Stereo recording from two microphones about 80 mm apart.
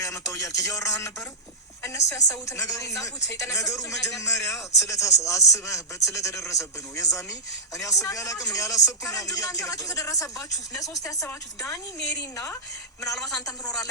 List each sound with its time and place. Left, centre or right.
0.0 s a woman's voice: left